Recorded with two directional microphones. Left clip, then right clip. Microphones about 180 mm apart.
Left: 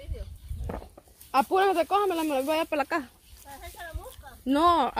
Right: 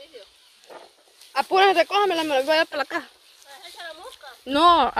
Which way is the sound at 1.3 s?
15° right (ahead or behind).